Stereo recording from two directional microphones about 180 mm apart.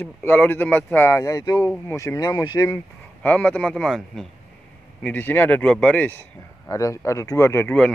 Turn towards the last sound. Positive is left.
turn(degrees=10)  # may be behind; listen again after turning